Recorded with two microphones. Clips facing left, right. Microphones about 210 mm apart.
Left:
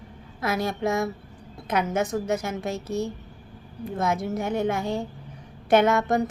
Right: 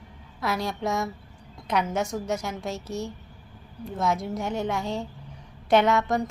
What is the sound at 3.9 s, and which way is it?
A woman's voice, 55° left (ahead or behind).